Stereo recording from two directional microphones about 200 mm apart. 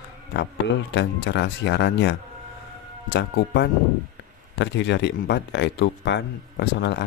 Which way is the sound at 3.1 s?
55° left (ahead or behind).